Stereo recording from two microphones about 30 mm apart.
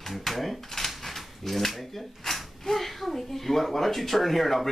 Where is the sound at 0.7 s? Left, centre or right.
Centre.